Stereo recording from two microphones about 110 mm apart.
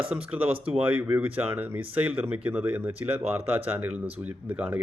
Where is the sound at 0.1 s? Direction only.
10° right (ahead or behind).